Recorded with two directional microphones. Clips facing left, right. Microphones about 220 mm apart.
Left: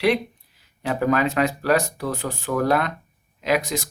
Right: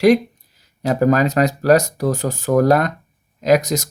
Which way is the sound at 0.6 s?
40° right (ahead or behind).